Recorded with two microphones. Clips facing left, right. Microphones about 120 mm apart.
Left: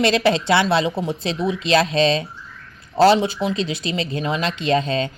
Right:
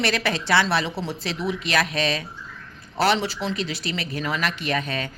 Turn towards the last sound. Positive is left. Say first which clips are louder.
# left 7 dB
turn(degrees=25)  # may be behind; listen again after turning